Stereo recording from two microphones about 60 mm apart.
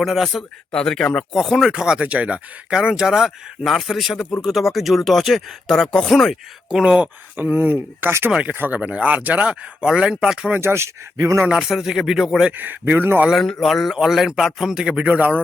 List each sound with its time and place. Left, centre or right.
0.0 s speech: centre
0.7 s speech: centre
1.7 s speech: centre
6.7 s a man's voice: centre
7.5 s speech: right
8.3 s speech: centre
9.8 s a man's voice: centre
10.6 s speech: right
11.4 s a man's voice: centre
12.5 s speech: right
13.3 s a man's voice: centre
14.9 s speech: right